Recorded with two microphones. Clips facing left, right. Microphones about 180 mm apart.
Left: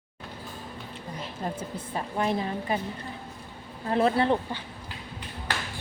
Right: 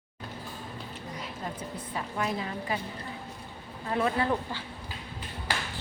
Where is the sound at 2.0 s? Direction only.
30° left (ahead or behind).